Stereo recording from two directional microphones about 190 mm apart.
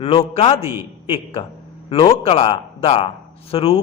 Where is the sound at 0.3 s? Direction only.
30° left (ahead or behind).